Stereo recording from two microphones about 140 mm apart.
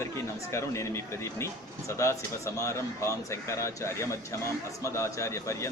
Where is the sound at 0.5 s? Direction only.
20° left (ahead or behind).